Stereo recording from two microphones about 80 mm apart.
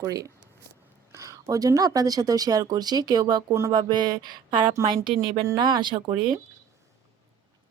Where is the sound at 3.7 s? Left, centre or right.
Right.